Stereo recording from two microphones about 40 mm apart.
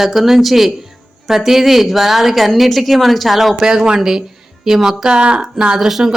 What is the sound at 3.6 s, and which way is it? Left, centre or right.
Speech, centre.